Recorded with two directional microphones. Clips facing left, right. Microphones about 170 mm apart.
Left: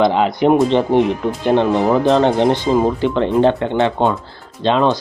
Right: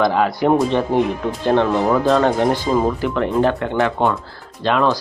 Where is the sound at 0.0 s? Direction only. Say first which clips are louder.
Left 3 dB; 25° left (ahead or behind).